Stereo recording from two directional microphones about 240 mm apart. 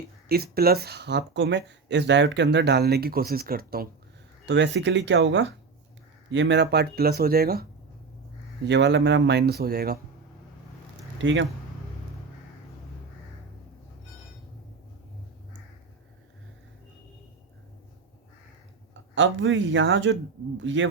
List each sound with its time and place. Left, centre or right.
0.3 s speech: right
11.2 s speech: right
19.1 s speech: right